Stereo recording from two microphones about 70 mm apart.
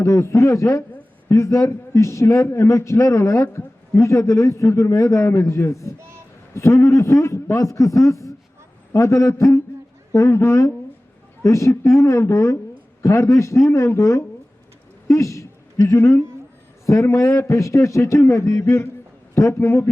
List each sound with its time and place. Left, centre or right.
0.0 s a man's voice: left
15.0 s a sound: left
15.9 s a man's voice: left